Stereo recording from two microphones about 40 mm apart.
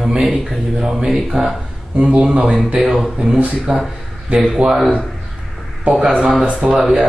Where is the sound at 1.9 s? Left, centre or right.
Right.